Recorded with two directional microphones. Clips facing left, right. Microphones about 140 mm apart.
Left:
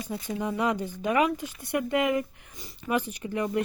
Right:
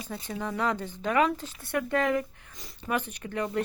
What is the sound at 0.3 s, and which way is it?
Speech, 15° left (ahead or behind).